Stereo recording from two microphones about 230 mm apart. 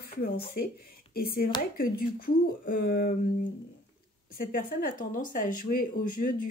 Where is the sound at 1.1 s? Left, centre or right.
Left.